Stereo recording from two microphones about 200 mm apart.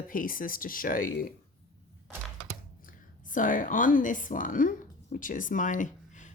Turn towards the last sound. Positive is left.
turn(degrees=40)  # may be behind; listen again after turning